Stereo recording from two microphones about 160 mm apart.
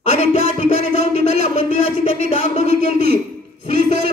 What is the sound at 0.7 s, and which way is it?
Speech, 70° right (ahead or behind).